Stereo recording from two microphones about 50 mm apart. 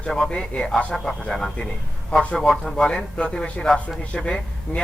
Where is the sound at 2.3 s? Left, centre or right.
Centre.